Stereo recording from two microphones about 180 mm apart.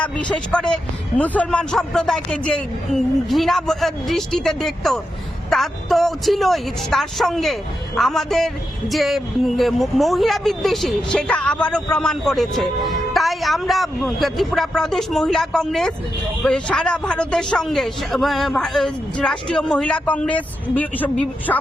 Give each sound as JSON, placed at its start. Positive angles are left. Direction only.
{"t": 0.0, "sound": "a man's voice", "side_deg": 5}